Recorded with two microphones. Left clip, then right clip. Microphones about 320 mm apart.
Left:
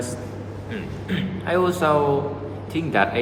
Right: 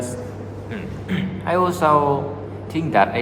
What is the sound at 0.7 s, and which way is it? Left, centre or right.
A man's voice, centre.